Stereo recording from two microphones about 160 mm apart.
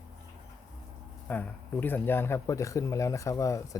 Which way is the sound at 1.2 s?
10° left (ahead or behind).